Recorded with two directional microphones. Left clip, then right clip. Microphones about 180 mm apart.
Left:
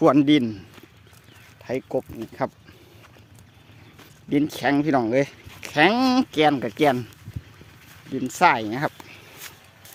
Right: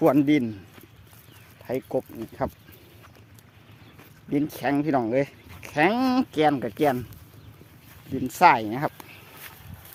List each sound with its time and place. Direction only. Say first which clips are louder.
0.0 s speech: left 3 dB; 15° left (ahead or behind)
1.6 s speech: left 1 dB; 5° left (ahead or behind)
4.3 s speech: left 4 dB; 20° left (ahead or behind)
8.1 s speech: right 1 dB; 5° left (ahead or behind)
9.0 s a sound: left 3 dB; 20° left (ahead or behind)